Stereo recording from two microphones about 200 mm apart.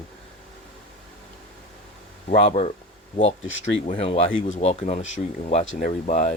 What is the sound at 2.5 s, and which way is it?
Speech, 30° left (ahead or behind).